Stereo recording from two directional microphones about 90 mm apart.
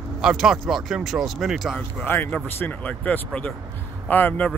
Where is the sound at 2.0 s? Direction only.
20° left (ahead or behind).